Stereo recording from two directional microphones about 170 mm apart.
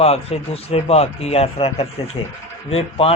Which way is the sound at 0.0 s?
35° left (ahead or behind).